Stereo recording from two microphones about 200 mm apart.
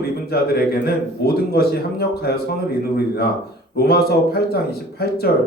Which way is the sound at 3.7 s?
50° left (ahead or behind).